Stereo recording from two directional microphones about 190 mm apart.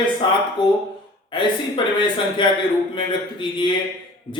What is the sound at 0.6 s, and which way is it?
Speech, 25° left (ahead or behind).